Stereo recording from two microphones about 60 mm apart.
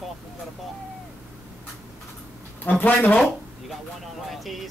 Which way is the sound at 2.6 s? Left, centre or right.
Left.